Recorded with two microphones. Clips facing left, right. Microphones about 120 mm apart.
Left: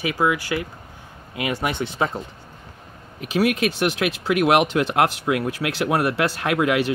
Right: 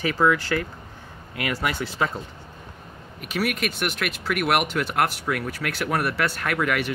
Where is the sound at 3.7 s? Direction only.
25° left (ahead or behind).